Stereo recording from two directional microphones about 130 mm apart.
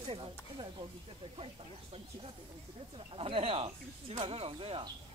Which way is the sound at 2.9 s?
45° right (ahead or behind).